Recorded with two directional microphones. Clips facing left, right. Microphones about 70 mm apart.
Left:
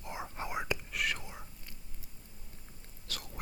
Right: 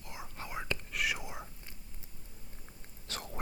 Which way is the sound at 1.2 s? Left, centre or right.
Centre.